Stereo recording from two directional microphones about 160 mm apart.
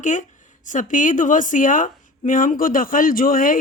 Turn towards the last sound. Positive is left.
turn(degrees=60)  # may be behind; listen again after turning